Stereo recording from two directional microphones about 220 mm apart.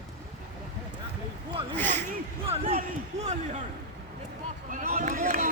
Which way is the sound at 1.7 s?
10° left (ahead or behind).